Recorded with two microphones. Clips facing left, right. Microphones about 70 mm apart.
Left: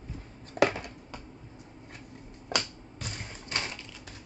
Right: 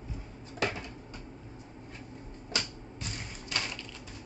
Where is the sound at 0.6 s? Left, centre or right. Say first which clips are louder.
Left 8 dB; left.